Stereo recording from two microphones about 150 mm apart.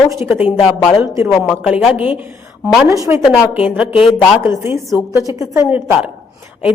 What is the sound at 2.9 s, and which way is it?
Speech, 20° right (ahead or behind).